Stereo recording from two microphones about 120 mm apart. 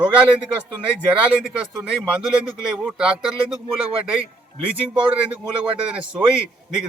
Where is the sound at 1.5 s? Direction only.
5° right (ahead or behind).